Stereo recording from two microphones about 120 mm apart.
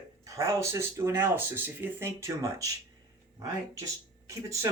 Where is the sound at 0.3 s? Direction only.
25° right (ahead or behind).